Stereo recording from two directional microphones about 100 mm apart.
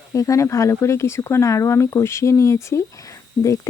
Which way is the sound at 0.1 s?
30° left (ahead or behind).